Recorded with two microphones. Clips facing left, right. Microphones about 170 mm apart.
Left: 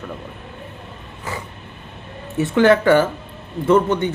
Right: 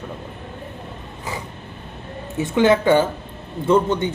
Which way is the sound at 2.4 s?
15° right (ahead or behind).